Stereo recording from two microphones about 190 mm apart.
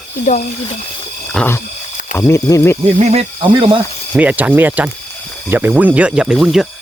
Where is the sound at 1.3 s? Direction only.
10° left (ahead or behind).